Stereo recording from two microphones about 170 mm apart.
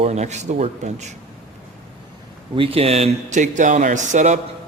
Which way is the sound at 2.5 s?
35° right (ahead or behind).